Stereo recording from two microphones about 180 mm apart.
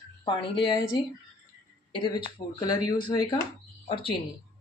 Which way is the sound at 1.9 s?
25° left (ahead or behind).